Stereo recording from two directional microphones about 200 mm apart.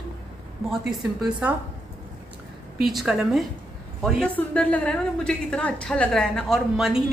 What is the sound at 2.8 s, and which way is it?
A woman's voice, centre (ahead or behind).